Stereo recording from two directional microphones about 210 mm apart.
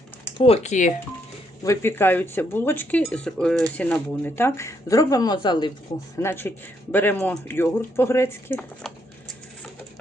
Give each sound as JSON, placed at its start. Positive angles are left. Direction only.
{"t": 0.3, "sound": "speech", "side_deg": 30}
{"t": 1.6, "sound": "speech", "side_deg": 10}
{"t": 6.1, "sound": "speech", "side_deg": 10}